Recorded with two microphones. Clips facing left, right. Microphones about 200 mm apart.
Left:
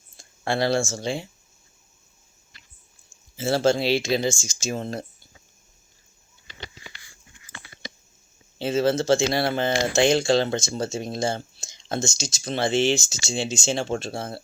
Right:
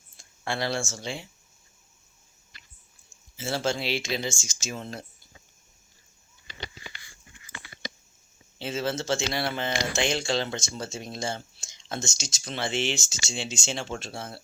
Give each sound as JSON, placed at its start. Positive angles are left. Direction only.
{"t": 0.2, "sound": "speech", "side_deg": 35}
{"t": 3.3, "sound": "speech", "side_deg": 35}
{"t": 8.5, "sound": "speech", "side_deg": 40}